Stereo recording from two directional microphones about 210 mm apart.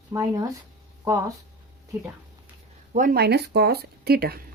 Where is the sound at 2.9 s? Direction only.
40° right (ahead or behind).